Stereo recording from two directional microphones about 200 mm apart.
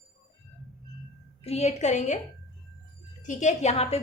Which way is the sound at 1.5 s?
35° left (ahead or behind).